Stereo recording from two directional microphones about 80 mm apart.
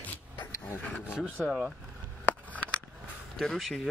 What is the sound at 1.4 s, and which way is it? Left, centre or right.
Speech, centre.